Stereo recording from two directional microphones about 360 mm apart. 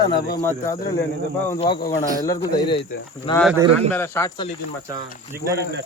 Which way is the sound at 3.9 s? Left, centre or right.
Centre.